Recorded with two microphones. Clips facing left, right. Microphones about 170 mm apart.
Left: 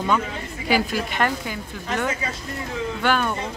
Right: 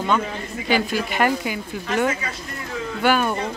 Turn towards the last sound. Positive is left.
turn(degrees=-10)  # may be behind; listen again after turning